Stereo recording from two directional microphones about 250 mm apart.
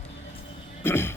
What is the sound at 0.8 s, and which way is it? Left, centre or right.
Speech, centre.